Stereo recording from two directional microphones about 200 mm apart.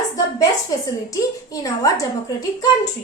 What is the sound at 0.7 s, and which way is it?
A woman's voice, 20° left (ahead or behind).